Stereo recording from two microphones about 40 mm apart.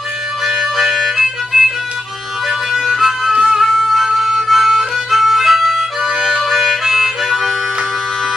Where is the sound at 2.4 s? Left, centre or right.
Centre.